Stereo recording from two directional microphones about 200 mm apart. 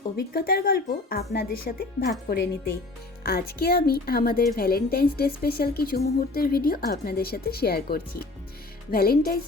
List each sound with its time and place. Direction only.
0.2 s speech: 50° left (ahead or behind)